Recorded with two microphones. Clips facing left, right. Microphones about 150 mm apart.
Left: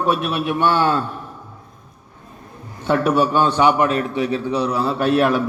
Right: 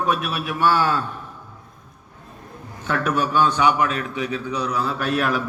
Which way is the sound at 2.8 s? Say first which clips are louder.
Left 6 dB; 30° left (ahead or behind).